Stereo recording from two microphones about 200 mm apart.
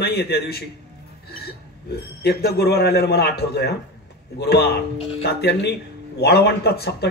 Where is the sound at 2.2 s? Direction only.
55° left (ahead or behind).